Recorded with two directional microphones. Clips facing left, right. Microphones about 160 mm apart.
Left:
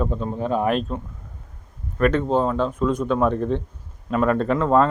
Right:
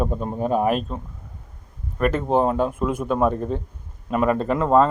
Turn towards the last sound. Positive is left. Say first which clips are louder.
# even
turn(degrees=-5)  # may be behind; listen again after turning